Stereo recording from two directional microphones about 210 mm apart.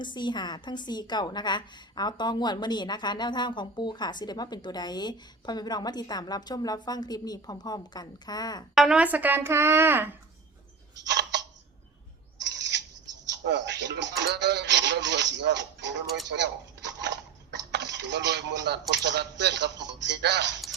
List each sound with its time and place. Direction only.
0.0 s a woman's voice: 20° left (ahead or behind)
8.7 s speech: centre (ahead or behind)
11.1 s a sound: 55° right (ahead or behind)
12.4 s owl: 55° right (ahead or behind)
13.4 s speech: 55° right (ahead or behind)